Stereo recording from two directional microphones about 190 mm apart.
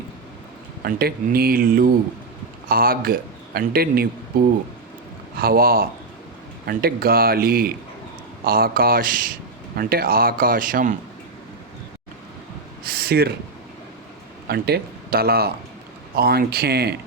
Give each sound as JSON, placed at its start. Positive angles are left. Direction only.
{"t": 0.9, "sound": "a man's voice", "side_deg": -50}
{"t": 5.4, "sound": "a man's voice", "side_deg": -50}
{"t": 12.8, "sound": "a sound", "side_deg": -50}
{"t": 14.4, "sound": "speech", "side_deg": -55}